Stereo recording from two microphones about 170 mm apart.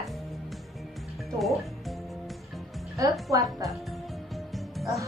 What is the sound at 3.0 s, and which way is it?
Speech, 20° right (ahead or behind).